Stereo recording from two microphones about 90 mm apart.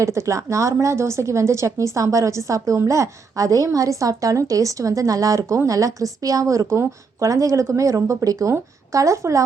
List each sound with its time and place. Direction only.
0.0 s a woman's voice: 35° right (ahead or behind)